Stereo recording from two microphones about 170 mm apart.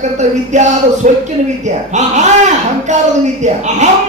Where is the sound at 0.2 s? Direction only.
45° right (ahead or behind).